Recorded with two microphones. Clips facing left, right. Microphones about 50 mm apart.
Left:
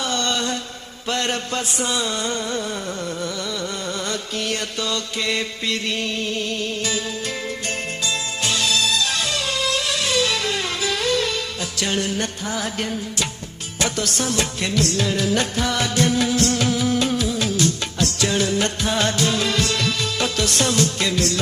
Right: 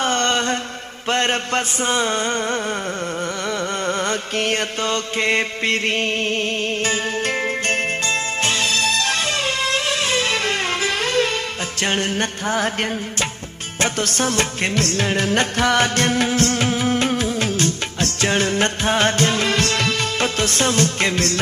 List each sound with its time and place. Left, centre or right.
0.0 s mantra: right
1.1 s music: right
3.8 s mantra: right
11.8 s music: right